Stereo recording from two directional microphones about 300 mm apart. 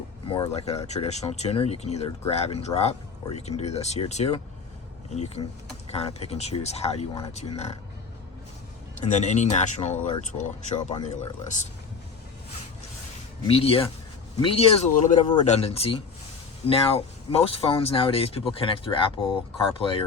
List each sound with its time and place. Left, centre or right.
0.3 s speech: centre
9.0 s speech: left
13.5 s speech: centre